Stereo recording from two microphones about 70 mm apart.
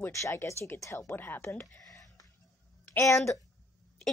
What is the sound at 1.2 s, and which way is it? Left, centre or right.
Speech, left.